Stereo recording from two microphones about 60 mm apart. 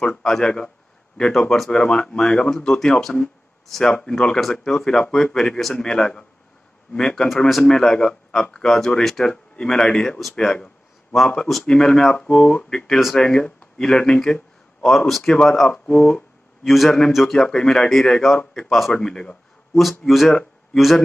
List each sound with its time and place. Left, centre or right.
0.0 s speech: centre
4.4 s a man's voice: centre
5.9 s a man's voice: centre
15.7 s speech: centre
16.6 s a man's voice: centre
17.5 s a man's voice: centre
18.9 s speech: centre
19.8 s a man's voice: centre